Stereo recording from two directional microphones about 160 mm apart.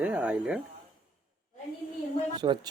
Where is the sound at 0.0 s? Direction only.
5° right (ahead or behind).